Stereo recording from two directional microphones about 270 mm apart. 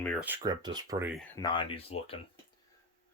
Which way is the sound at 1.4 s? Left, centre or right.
Centre.